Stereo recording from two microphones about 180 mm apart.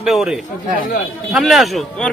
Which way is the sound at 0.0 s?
Centre (ahead or behind).